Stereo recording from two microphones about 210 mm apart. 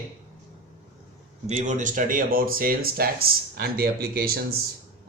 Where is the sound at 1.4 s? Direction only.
35° right (ahead or behind).